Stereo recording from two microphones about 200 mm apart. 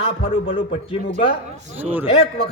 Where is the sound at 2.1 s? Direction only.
30° left (ahead or behind).